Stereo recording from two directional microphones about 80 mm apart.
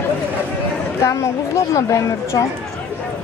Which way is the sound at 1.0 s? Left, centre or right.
Left.